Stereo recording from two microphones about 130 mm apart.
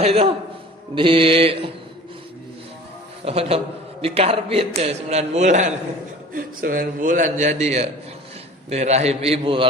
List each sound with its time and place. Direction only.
0.0 s a man's voice: 50° right (ahead or behind)
3.2 s a man's voice: 50° right (ahead or behind); by 5.7 s 65° right (ahead or behind)
6.3 s a man's voice: 90° right; by 9.6 s 45° right (ahead or behind)